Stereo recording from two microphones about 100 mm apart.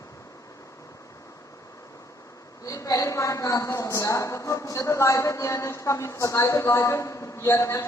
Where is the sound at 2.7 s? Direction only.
35° left (ahead or behind).